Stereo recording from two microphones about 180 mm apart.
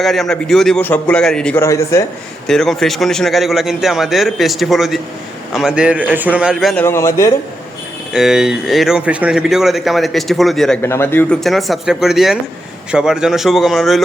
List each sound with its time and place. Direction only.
0.0 s speech: centre (ahead or behind)
1.6 s a man's voice: 15° left (ahead or behind)
2.5 s speech: centre (ahead or behind)
6.8 s a man's voice: 15° left (ahead or behind)
8.1 s speech: 5° right (ahead or behind)
10.8 s speech: 15° left (ahead or behind)